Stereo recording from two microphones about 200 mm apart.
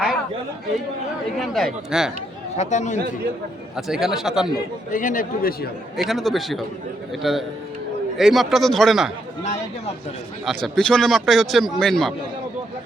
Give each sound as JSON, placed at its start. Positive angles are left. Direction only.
{"t": 1.4, "sound": "speech", "side_deg": 0}
{"t": 2.6, "sound": "a man's voice", "side_deg": 35}
{"t": 3.8, "sound": "speech", "side_deg": 0}
{"t": 4.9, "sound": "a man's voice", "side_deg": 40}
{"t": 6.0, "sound": "speech", "side_deg": 0}
{"t": 9.4, "sound": "a man's voice", "side_deg": 35}
{"t": 10.4, "sound": "speech", "side_deg": 0}